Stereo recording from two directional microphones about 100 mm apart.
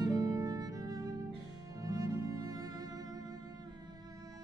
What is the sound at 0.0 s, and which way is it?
Music, 40° right (ahead or behind).